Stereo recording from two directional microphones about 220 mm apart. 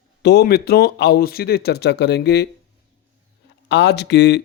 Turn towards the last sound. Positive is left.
turn(degrees=50)  # may be behind; listen again after turning